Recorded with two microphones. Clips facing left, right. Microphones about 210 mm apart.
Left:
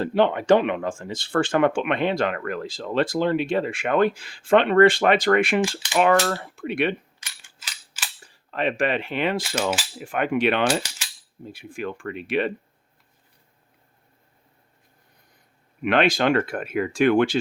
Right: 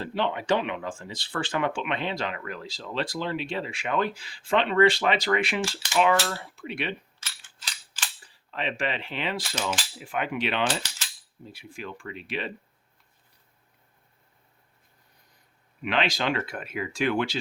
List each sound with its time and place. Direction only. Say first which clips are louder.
0.0 s speech: left 8 dB; 50° left (ahead or behind)
7.2 s cap gun: even; 10° left (ahead or behind)
8.3 s speech: left 7 dB; 50° left (ahead or behind)
15.8 s speech: left 7 dB; 55° left (ahead or behind)